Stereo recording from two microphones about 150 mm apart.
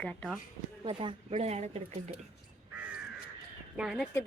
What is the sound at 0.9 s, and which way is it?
Speech, 35° right (ahead or behind).